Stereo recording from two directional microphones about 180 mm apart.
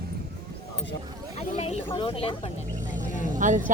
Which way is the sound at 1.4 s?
35° left (ahead or behind).